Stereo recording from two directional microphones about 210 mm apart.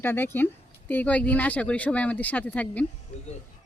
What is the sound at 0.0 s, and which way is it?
Speech, 10° left (ahead or behind).